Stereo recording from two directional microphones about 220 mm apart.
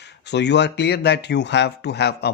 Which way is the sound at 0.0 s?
50° left (ahead or behind).